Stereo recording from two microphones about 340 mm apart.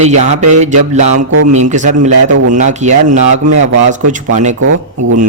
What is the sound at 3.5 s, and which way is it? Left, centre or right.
Speech, right.